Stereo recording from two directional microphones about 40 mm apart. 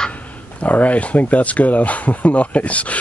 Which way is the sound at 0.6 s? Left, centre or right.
Left.